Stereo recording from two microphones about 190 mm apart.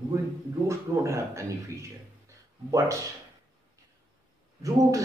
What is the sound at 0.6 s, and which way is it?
Speech, 15° right (ahead or behind).